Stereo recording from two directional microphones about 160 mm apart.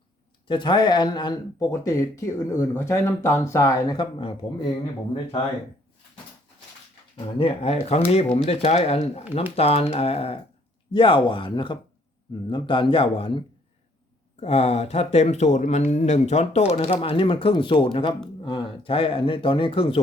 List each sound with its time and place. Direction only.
0.4 s speech: 30° left (ahead or behind)
7.2 s speech: 35° left (ahead or behind)
14.4 s speech: 40° left (ahead or behind)